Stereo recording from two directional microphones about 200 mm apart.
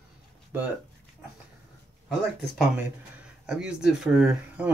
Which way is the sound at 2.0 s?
Centre (ahead or behind).